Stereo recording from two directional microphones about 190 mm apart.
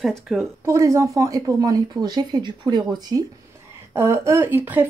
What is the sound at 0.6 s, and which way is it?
Speech, 15° right (ahead or behind).